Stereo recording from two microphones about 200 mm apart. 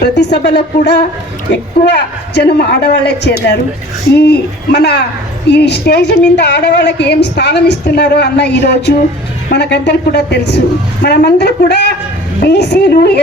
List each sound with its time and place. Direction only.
0.2 s a woman's voice: 60° left (ahead or behind)